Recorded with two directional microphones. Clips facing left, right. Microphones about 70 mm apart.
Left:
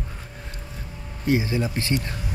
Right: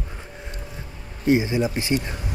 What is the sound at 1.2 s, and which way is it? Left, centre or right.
Speech, right.